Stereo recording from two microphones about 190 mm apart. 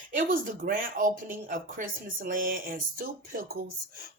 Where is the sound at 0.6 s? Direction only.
50° right (ahead or behind).